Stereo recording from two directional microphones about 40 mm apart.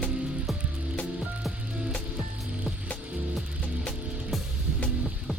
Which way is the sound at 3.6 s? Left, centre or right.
Left.